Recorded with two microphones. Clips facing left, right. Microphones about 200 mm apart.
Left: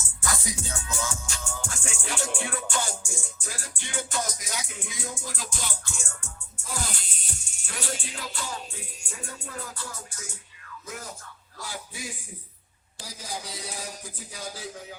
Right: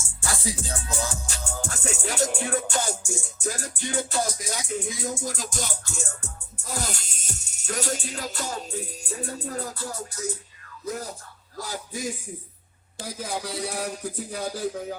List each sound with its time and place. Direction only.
0.2 s music: 30° right (ahead or behind)
10.8 s a sound: 35° right (ahead or behind)
13.0 s a man's voice: 55° right (ahead or behind)